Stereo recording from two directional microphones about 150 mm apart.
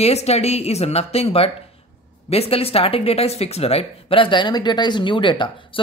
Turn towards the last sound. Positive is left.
turn(degrees=30)  # may be behind; listen again after turning